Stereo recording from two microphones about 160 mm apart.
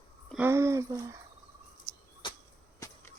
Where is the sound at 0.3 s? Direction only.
15° right (ahead or behind).